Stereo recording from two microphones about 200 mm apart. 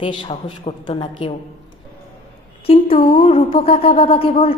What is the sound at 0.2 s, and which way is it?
Speech, 25° left (ahead or behind).